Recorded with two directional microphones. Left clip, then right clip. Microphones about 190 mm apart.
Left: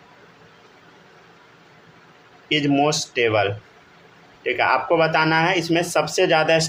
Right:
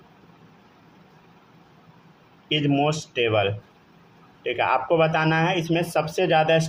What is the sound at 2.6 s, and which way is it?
A man's voice, 5° right (ahead or behind).